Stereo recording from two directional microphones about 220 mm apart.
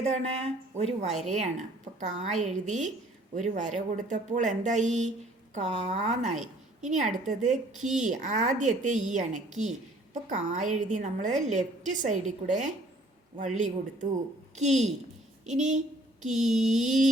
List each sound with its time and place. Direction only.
0.0 s a woman's voice: 30° right (ahead or behind)